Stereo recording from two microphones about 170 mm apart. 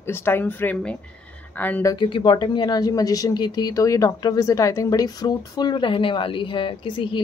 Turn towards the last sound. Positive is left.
turn(degrees=30)  # may be behind; listen again after turning